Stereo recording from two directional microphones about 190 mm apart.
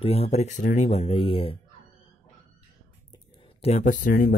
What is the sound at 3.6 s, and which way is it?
Speech, 35° left (ahead or behind).